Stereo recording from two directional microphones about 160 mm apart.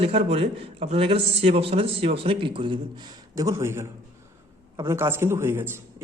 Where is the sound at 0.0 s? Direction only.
40° right (ahead or behind).